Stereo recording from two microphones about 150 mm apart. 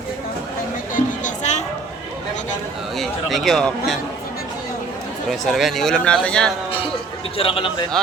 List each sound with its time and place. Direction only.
0.9 s music: 55° left (ahead or behind)
3.0 s a man's voice: centre (ahead or behind)
5.3 s a man's voice: centre (ahead or behind)
7.3 s a man's voice: 40° left (ahead or behind)